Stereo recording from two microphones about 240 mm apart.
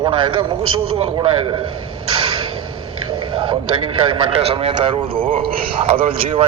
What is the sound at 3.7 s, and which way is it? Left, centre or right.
A man's voice, right.